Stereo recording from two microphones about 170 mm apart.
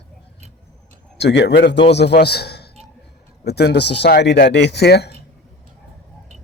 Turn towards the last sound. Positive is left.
turn(degrees=70)  # may be behind; listen again after turning